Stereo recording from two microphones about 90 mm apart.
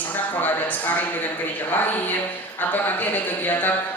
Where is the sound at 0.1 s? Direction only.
20° left (ahead or behind).